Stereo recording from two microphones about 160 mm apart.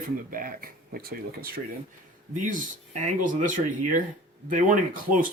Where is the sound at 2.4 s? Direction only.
55° right (ahead or behind).